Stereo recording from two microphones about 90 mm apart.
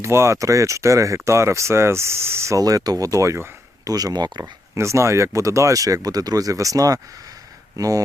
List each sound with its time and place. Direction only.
0.0 s speech: 30° right (ahead or behind)
2.6 s speech: 45° right (ahead or behind)
4.7 s speech: 35° right (ahead or behind)